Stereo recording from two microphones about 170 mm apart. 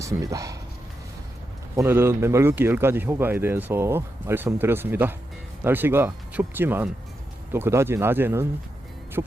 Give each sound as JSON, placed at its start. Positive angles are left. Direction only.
{"t": 0.0, "sound": "speech", "side_deg": -20}
{"t": 1.7, "sound": "a man's voice", "side_deg": -15}